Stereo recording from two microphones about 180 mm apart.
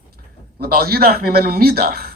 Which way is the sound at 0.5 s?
55° right (ahead or behind).